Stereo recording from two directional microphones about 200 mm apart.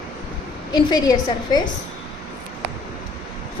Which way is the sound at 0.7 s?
20° left (ahead or behind).